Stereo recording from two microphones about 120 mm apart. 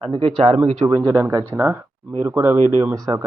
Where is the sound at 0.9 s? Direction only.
25° right (ahead or behind).